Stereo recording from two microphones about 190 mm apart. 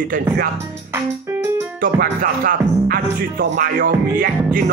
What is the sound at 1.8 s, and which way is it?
Music, 45° right (ahead or behind).